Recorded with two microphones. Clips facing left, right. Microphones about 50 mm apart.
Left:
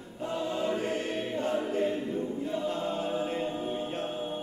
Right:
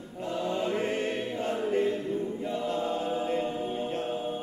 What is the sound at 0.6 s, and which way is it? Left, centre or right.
Choir, right.